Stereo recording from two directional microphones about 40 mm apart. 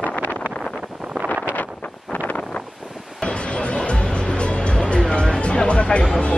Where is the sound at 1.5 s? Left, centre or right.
Left.